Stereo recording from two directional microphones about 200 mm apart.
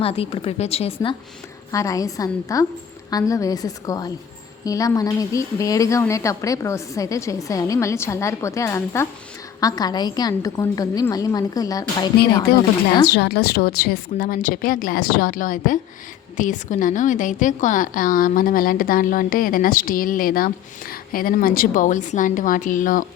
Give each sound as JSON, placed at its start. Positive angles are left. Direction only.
{"t": 0.0, "sound": "a woman's voice", "side_deg": 30}
{"t": 1.7, "sound": "a woman's voice", "side_deg": 15}
{"t": 13.1, "sound": "a woman's voice", "side_deg": 55}